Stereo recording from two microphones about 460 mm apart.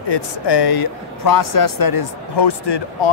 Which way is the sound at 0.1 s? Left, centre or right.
Left.